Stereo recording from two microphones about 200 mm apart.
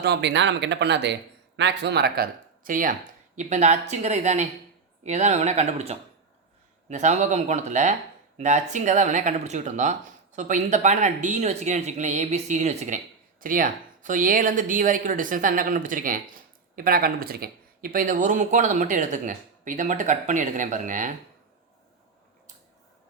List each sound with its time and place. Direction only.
0.0 s speech: 55° right (ahead or behind); by 21.1 s 40° right (ahead or behind)